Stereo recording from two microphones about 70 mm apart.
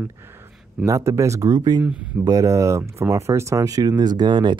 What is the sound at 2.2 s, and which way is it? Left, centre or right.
Speech, right.